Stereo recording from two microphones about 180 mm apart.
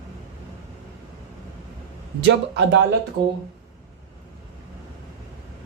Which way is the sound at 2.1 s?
80° right.